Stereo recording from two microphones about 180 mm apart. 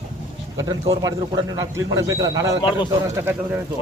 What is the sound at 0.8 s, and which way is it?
A man's voice, 20° right (ahead or behind).